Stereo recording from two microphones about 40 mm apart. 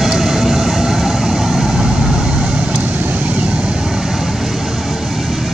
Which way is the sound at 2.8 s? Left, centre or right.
Right.